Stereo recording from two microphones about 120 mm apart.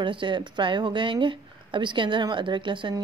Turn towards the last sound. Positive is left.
turn(degrees=-40)  # may be behind; listen again after turning